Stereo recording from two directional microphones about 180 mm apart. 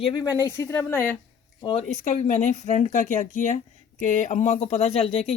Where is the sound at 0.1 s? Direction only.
20° left (ahead or behind).